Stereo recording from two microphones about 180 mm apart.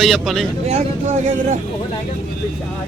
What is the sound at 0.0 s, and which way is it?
Speech, centre (ahead or behind).